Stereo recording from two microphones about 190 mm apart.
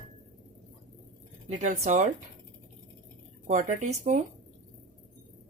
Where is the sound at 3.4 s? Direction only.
40° right (ahead or behind).